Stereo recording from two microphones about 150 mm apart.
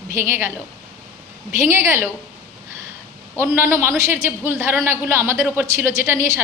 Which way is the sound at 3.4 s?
15° right (ahead or behind).